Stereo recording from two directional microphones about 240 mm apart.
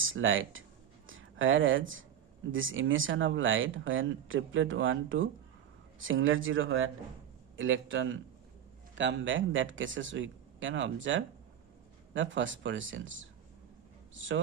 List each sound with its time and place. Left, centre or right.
0.0 s speech: right